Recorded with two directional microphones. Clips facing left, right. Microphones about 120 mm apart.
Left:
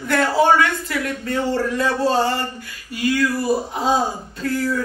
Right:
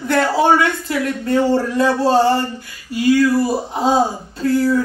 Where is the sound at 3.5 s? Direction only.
30° right (ahead or behind).